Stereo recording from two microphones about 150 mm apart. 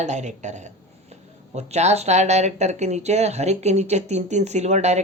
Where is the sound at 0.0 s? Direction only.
50° right (ahead or behind).